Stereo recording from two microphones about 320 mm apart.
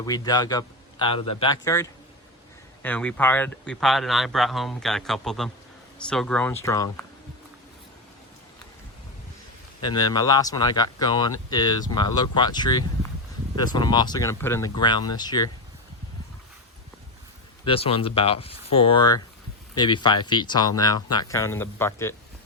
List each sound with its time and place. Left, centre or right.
0.0 s speech: centre
9.8 s speech: centre
17.7 s speech: centre